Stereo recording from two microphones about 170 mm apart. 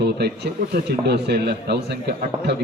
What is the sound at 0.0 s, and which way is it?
A man's voice, 75° right (ahead or behind).